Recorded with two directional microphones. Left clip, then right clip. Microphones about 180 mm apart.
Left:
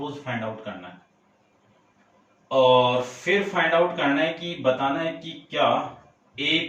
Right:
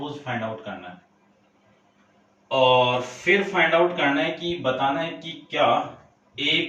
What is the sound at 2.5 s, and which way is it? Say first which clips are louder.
Speech: left 1 dB; 15° right (ahead or behind).